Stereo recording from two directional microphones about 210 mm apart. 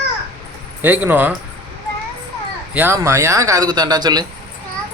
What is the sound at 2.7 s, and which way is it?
Speech, 10° right (ahead or behind).